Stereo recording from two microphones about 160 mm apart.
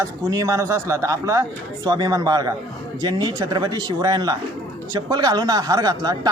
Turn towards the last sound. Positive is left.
turn(degrees=-25)  # may be behind; listen again after turning